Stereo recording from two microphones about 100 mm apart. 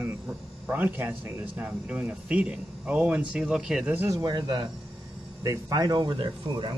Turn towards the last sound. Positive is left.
turn(degrees=-50)  # may be behind; listen again after turning